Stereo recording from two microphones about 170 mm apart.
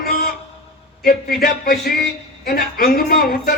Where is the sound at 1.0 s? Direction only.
60° left (ahead or behind).